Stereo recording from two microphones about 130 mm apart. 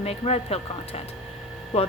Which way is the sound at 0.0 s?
55° left (ahead or behind).